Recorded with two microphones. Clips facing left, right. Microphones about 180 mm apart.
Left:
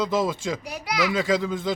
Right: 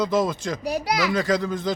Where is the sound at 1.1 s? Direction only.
5° left (ahead or behind).